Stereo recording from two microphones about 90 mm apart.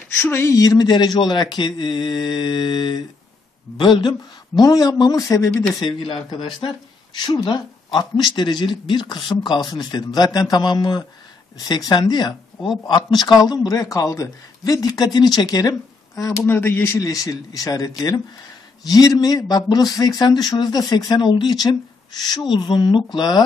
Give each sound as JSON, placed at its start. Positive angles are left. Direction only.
{"t": 0.2, "sound": "speech", "side_deg": 30}
{"t": 5.8, "sound": "speech", "side_deg": 70}
{"t": 7.4, "sound": "speech", "side_deg": 55}
{"t": 16.4, "sound": "speech", "side_deg": 25}